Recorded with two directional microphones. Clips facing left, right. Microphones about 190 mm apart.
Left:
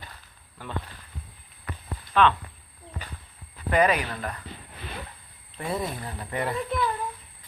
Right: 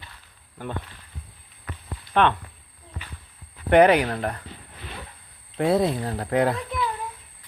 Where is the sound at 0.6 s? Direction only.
50° right (ahead or behind).